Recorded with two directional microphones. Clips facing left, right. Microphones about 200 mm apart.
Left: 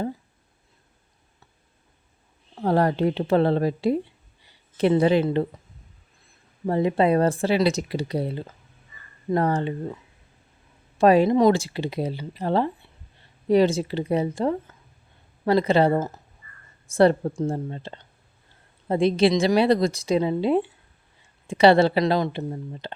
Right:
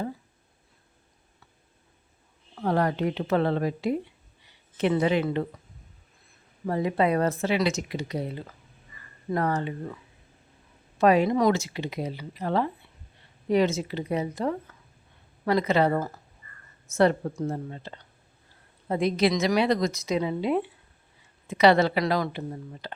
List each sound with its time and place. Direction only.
2.6 s speech: 35° left (ahead or behind)
6.7 s speech: 30° left (ahead or behind)